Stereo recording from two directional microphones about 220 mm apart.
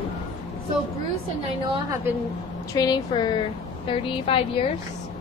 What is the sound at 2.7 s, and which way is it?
A woman's voice, 15° left (ahead or behind).